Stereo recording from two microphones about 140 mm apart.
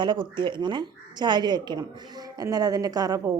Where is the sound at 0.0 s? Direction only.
35° right (ahead or behind).